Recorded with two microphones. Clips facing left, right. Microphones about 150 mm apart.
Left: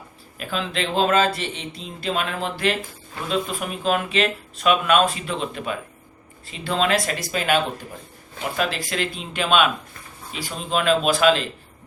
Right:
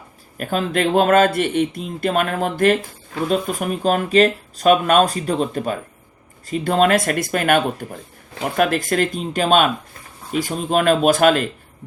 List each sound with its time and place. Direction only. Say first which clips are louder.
0.3 s speech: right 6 dB; 50° right (ahead or behind)